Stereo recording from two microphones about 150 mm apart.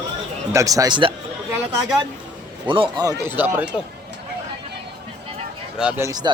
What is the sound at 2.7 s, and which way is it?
Speech, 30° right (ahead or behind).